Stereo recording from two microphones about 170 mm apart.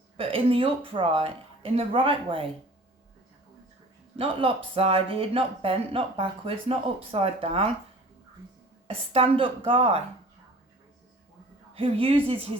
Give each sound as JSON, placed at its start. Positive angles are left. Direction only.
{"t": 0.2, "sound": "speech", "side_deg": -30}
{"t": 4.2, "sound": "speech", "side_deg": -30}
{"t": 8.9, "sound": "speech", "side_deg": -35}
{"t": 11.7, "sound": "speech", "side_deg": -35}